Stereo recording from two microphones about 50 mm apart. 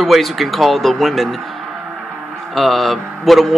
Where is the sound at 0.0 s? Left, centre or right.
Centre.